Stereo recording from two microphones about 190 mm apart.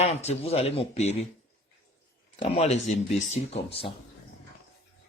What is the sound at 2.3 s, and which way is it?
A man's voice, 35° left (ahead or behind).